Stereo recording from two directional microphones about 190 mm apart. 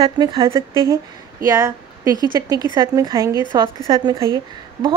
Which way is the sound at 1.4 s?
20° right (ahead or behind).